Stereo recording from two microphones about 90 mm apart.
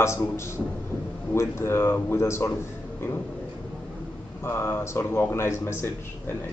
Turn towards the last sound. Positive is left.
turn(degrees=30)  # may be behind; listen again after turning